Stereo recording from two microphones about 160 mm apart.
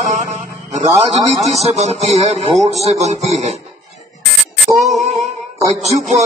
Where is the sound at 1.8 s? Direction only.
45° right (ahead or behind).